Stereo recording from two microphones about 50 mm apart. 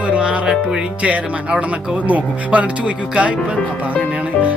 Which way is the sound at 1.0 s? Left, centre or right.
Right.